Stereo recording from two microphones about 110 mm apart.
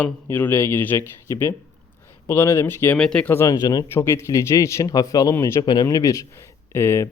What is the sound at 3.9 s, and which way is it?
Speech, 25° left (ahead or behind).